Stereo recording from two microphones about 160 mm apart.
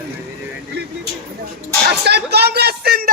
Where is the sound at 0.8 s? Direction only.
90° right.